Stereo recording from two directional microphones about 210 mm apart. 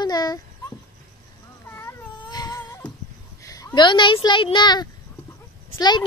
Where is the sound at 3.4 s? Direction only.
15° left (ahead or behind).